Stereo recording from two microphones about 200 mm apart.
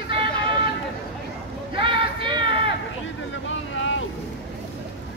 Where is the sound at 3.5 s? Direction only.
75° left (ahead or behind).